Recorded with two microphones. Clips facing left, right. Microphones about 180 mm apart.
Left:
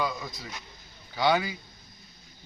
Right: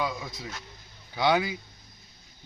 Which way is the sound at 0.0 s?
Centre (ahead or behind).